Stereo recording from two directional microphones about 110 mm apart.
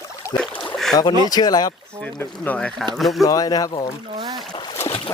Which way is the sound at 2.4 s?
15° left (ahead or behind).